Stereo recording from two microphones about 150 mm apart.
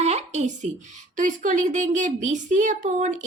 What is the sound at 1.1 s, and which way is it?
A woman's voice, 60° right (ahead or behind).